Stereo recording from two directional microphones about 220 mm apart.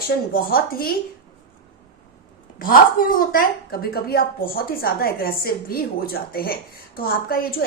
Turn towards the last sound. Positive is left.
turn(degrees=40)  # may be behind; listen again after turning